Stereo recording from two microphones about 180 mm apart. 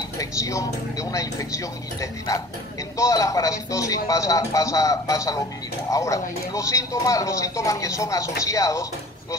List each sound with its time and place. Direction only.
0.2 s speech: 15° left (ahead or behind)